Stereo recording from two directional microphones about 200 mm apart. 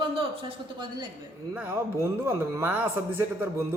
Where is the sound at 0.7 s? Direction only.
25° right (ahead or behind).